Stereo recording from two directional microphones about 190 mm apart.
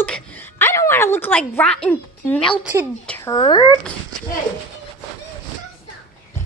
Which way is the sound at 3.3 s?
25° left (ahead or behind).